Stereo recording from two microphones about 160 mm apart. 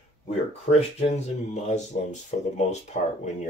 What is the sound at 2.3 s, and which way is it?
Speech, 55° left (ahead or behind).